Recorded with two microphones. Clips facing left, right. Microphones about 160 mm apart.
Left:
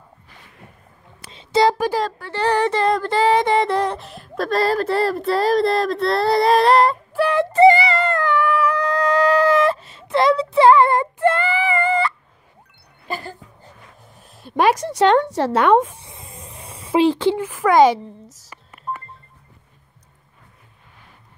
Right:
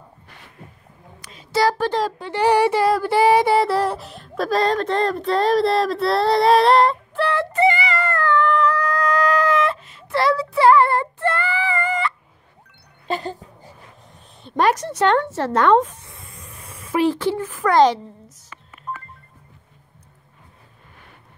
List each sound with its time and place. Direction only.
1.2 s a sound: 25° left (ahead or behind)
2.1 s female singing: 15° right (ahead or behind); by 7.0 s centre (ahead or behind)
7.2 s speech: 10° left (ahead or behind)
7.5 s music: 35° left (ahead or behind)
8.0 s dog: 20° left (ahead or behind)
8.7 s a sound: 25° left (ahead or behind)
13.1 s speech: 20° right (ahead or behind)
14.4 s speech: 10° left (ahead or behind)
16.3 s a sound: 25° left (ahead or behind)
17.4 s speech: 15° left (ahead or behind)
18.9 s music: 10° left (ahead or behind)